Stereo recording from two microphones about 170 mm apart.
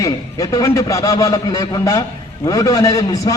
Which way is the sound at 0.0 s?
20° left (ahead or behind).